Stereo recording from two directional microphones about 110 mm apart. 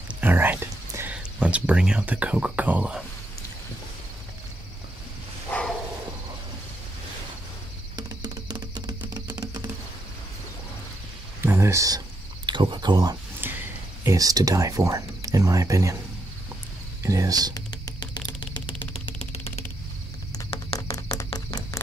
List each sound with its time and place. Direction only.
0.1 s speech: 15° right (ahead or behind)
5.5 s dog: 10° left (ahead or behind)
7.9 s music: 40° right (ahead or behind)
11.4 s a sound: 25° right (ahead or behind)
12.4 s speech: 45° right (ahead or behind)
13.4 s a sound: 20° right (ahead or behind)
14.0 s speech: 35° right (ahead or behind)
17.0 s speech: 30° right (ahead or behind)
17.6 s music: 35° left (ahead or behind)
19.1 s music: 65° left (ahead or behind)
20.4 s a sound: 60° left (ahead or behind)
20.9 s a sound: 30° left (ahead or behind)